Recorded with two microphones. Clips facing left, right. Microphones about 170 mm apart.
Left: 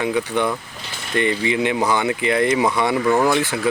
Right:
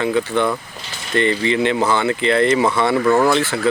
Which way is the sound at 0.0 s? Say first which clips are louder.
Right 2 dB; 10° left (ahead or behind).